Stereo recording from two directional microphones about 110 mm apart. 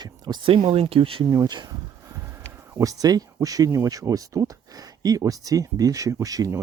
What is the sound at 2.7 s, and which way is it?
Speech, 35° right (ahead or behind).